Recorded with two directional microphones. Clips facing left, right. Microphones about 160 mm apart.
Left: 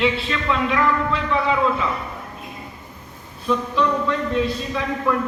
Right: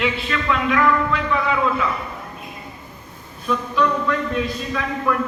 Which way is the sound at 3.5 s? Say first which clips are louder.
Even; 25° left (ahead or behind).